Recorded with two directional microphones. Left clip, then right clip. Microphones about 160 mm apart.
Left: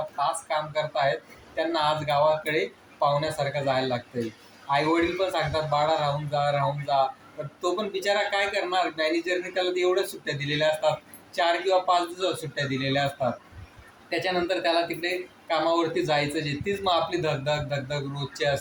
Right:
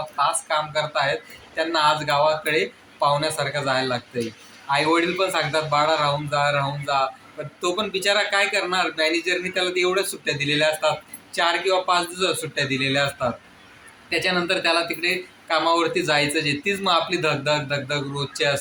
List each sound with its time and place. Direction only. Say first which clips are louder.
0.2 s speech: right 5 dB; 5° right (ahead or behind)